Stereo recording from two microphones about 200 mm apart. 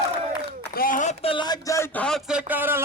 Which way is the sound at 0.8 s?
40° left (ahead or behind).